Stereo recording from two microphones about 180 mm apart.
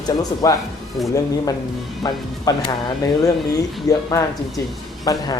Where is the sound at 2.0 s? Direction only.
25° left (ahead or behind).